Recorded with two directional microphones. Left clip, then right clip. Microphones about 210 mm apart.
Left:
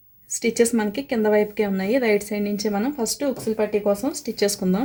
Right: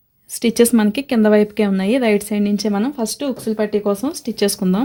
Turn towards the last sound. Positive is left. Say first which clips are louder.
# right 3 dB
turn(degrees=-40)  # may be behind; listen again after turning